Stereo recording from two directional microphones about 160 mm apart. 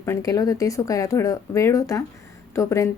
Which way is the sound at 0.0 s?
20° left (ahead or behind).